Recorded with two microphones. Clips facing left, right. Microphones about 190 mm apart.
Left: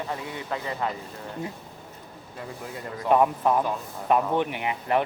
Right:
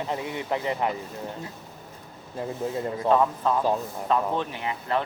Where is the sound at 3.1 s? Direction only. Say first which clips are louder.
Left 2 dB; 15° left (ahead or behind).